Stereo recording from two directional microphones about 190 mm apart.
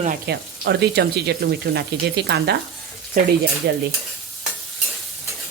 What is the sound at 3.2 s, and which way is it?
Speech, 45° right (ahead or behind).